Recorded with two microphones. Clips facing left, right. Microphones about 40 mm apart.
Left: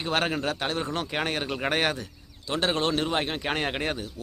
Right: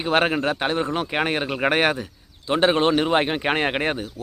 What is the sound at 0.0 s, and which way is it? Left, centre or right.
Speech, right.